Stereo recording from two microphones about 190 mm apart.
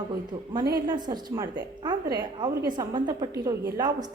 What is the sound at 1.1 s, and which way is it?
A woman's voice, 20° right (ahead or behind).